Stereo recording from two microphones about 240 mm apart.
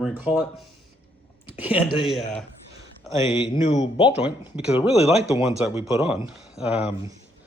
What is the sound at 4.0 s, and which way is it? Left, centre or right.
Speech, centre.